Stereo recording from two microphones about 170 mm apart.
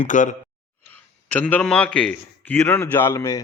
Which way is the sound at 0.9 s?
10° left (ahead or behind).